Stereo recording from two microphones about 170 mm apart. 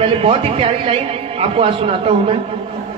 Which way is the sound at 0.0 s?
35° right (ahead or behind).